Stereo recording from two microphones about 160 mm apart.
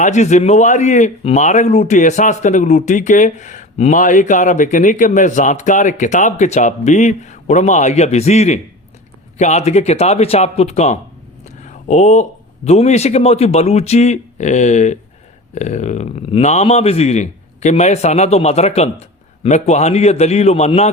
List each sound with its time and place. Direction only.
0.0 s a man's voice: 45° left (ahead or behind)
11.4 s a sound: 45° left (ahead or behind)
12.6 s a man's voice: 45° left (ahead or behind)